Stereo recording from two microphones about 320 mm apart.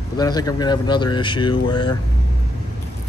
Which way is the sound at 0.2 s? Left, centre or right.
Centre.